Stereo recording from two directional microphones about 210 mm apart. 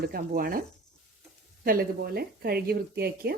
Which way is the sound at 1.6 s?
45° right (ahead or behind).